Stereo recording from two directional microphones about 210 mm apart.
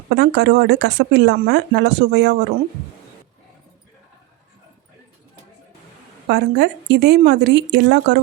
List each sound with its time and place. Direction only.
0.1 s speech: 55° right (ahead or behind)
6.2 s speech: 50° right (ahead or behind)